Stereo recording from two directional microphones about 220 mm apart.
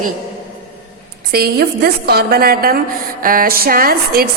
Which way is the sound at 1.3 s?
45° right (ahead or behind).